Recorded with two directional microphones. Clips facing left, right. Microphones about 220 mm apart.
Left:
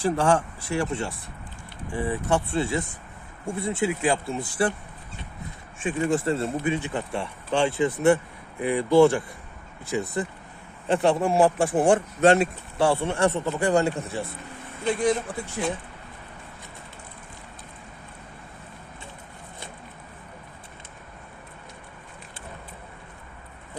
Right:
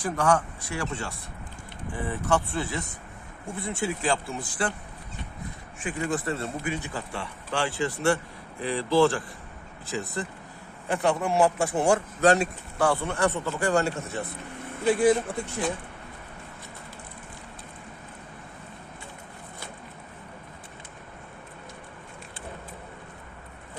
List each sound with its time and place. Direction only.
0.0 s speech: 25° left (ahead or behind)
5.8 s speech: 25° left (ahead or behind)
14.8 s speech: 5° right (ahead or behind)